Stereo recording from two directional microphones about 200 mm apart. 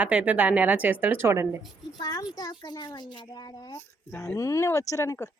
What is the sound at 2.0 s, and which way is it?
Speech, 20° left (ahead or behind).